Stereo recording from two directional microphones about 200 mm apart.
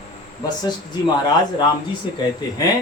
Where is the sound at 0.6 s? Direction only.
20° left (ahead or behind).